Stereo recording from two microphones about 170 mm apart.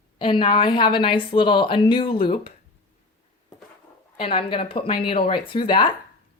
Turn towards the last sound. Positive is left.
turn(degrees=30)  # may be behind; listen again after turning